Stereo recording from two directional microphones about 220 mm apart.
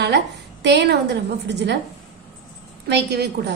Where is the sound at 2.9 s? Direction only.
50° right (ahead or behind).